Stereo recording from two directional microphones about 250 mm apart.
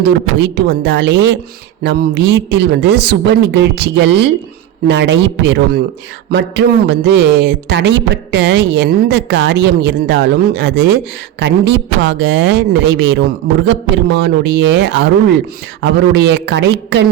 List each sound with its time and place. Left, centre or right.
0.3 s a man's voice: right